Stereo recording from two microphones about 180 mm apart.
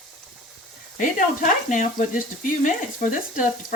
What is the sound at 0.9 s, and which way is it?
Speech, 45° left (ahead or behind).